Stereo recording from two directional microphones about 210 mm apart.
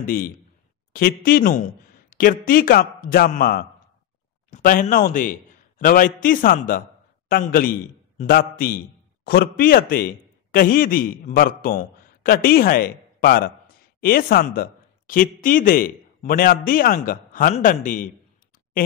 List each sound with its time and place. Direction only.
0.9 s a man's voice: 45° left (ahead or behind)